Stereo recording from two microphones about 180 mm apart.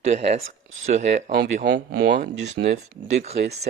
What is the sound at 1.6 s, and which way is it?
Speech, 65° right (ahead or behind).